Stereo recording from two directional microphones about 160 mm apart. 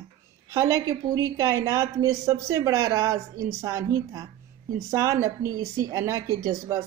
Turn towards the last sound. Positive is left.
turn(degrees=-20)  # may be behind; listen again after turning